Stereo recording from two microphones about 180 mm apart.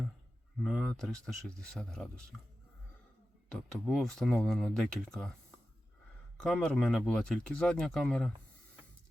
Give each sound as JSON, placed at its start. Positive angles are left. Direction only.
{"t": 0.6, "sound": "speech", "side_deg": 0}
{"t": 3.5, "sound": "speech", "side_deg": 5}
{"t": 6.3, "sound": "speech", "side_deg": 5}